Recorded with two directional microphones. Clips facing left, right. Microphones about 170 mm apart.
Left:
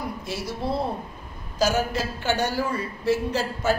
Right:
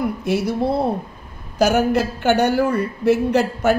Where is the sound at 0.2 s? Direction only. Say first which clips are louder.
Right 10 dB; 65° right (ahead or behind).